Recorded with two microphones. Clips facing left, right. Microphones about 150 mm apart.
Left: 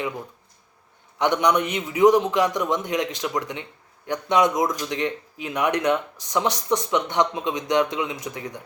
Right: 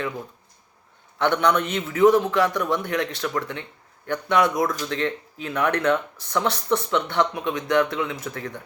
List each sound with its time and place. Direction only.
1.2 s a man's voice: 15° left (ahead or behind)